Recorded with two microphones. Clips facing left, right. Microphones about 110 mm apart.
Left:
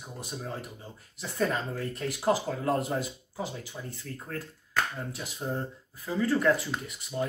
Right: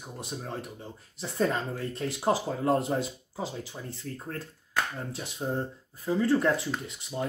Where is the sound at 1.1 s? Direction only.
30° right (ahead or behind).